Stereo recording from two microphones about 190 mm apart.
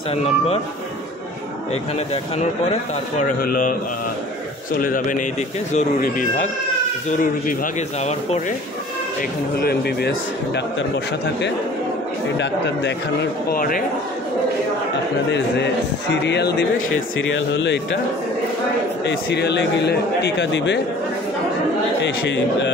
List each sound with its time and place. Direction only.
0.1 s speech: 30° left (ahead or behind)
3.2 s speech: 50° left (ahead or behind)
4.8 s speech: 45° left (ahead or behind)
9.6 s a man's voice: 55° left (ahead or behind)
12.4 s a man's voice: 65° left (ahead or behind); by 13.8 s 50° left (ahead or behind)
15.3 s a man's voice: 70° left (ahead or behind)
19.0 s a man's voice: 65° left (ahead or behind)
22.0 s a man's voice: 70° left (ahead or behind)